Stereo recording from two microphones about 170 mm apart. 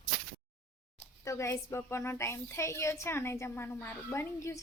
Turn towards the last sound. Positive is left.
turn(degrees=15)  # may be behind; listen again after turning